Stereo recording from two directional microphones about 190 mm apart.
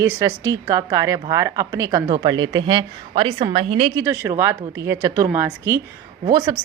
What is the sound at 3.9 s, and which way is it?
A woman's voice, 15° right (ahead or behind).